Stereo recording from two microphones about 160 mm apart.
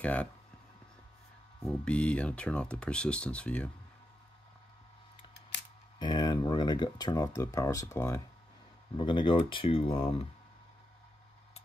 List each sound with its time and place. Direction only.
0.0 s speech: 10° left (ahead or behind)
1.6 s speech: 5° left (ahead or behind)
5.9 s speech: 25° left (ahead or behind)
8.9 s speech: 30° left (ahead or behind)